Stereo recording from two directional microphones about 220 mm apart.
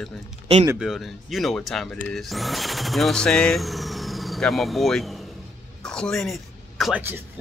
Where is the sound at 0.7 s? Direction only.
Centre (ahead or behind).